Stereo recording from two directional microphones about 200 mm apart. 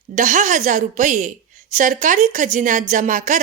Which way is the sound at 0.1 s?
40° right (ahead or behind).